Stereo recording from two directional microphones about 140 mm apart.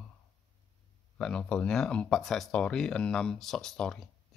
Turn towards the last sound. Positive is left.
turn(degrees=5)  # may be behind; listen again after turning